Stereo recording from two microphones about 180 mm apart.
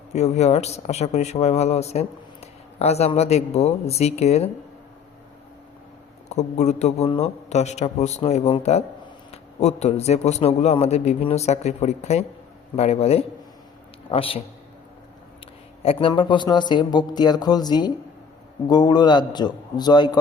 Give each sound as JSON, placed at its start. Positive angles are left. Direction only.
{"t": 0.1, "sound": "speech", "side_deg": 40}
{"t": 6.2, "sound": "speech", "side_deg": 40}
{"t": 15.8, "sound": "speech", "side_deg": 30}